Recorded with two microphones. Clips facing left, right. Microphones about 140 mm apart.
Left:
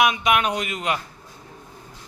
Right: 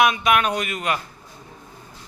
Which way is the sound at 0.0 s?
15° left (ahead or behind).